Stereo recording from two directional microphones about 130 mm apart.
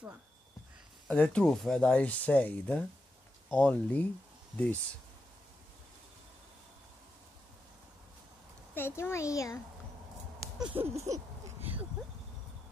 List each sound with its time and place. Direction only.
1.0 s speech: 5° left (ahead or behind)
8.7 s a child's voice: 15° left (ahead or behind)
10.7 s a sound: 50° right (ahead or behind)